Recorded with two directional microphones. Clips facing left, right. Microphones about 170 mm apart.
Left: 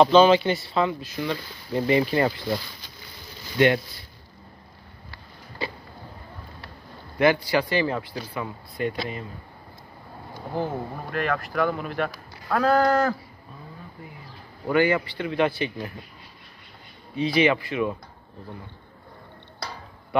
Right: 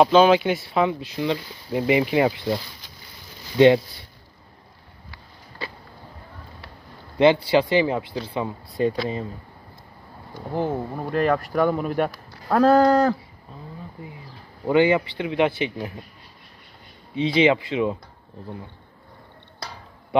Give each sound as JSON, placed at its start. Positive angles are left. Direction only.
{"t": 0.0, "sound": "speech", "side_deg": -5}
{"t": 0.7, "sound": "speech", "side_deg": -20}
{"t": 3.5, "sound": "speech", "side_deg": -25}
{"t": 7.2, "sound": "speech", "side_deg": -25}
{"t": 10.5, "sound": "speech", "side_deg": -20}
{"t": 12.8, "sound": "speech", "side_deg": -20}
{"t": 14.7, "sound": "speech", "side_deg": -20}
{"t": 17.1, "sound": "speech", "side_deg": -20}